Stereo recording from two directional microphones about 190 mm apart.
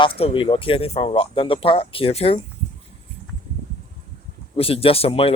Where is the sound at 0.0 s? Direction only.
30° left (ahead or behind).